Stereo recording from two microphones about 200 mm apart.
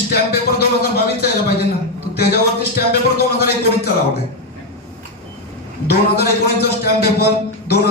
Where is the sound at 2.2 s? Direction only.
50° left (ahead or behind).